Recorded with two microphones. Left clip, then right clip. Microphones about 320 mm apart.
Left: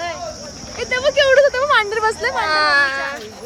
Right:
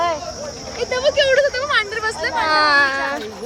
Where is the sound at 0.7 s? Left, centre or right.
Centre.